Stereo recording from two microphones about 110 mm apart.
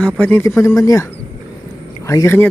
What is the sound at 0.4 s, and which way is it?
Speech, 25° left (ahead or behind).